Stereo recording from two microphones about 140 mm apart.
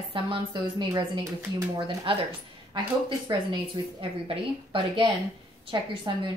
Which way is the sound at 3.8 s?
35° right (ahead or behind).